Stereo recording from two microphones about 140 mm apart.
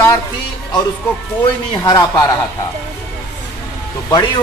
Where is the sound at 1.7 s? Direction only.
30° left (ahead or behind).